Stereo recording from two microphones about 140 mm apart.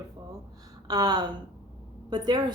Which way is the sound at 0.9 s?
30° right (ahead or behind).